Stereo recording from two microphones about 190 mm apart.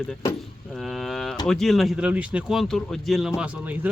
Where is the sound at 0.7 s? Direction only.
Centre (ahead or behind).